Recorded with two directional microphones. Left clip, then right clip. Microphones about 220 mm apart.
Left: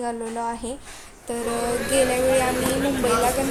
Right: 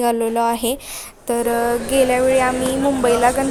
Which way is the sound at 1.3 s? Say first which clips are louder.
Right 9 dB; 35° right (ahead or behind).